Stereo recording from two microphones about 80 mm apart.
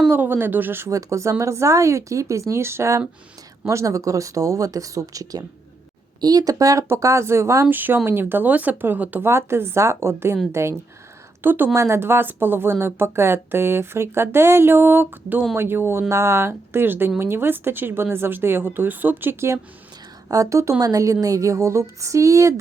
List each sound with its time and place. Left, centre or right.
0.1 s a woman's voice: right
0.9 s a woman's voice: right
6.8 s speech: right
7.7 s a woman's voice: right
9.3 s speech: right
11.4 s a woman's voice: right
11.7 s a woman's voice: right
20.2 s a woman's voice: right